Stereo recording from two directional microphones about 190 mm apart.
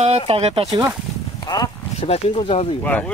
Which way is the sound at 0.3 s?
30° right (ahead or behind).